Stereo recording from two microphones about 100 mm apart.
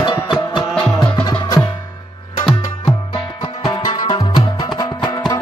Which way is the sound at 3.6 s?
45° left (ahead or behind).